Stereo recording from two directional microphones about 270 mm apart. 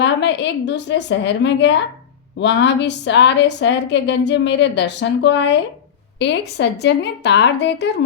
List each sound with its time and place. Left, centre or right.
0.0 s a woman's voice: left